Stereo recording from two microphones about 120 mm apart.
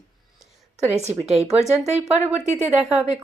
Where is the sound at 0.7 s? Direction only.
65° right (ahead or behind).